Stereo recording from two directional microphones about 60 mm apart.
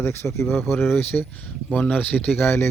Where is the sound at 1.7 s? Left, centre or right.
Left.